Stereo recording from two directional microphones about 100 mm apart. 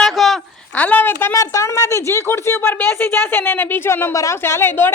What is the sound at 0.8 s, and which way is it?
Speech, 15° left (ahead or behind).